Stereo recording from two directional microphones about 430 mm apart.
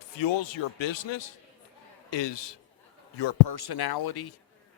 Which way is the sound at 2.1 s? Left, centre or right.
Left.